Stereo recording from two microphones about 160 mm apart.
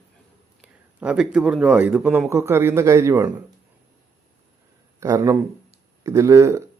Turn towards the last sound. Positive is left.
turn(degrees=-20)  # may be behind; listen again after turning